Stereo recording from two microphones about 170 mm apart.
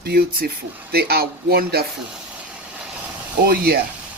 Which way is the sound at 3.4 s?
65° right (ahead or behind).